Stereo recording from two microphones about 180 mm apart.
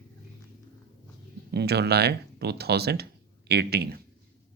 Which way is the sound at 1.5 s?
65° right (ahead or behind).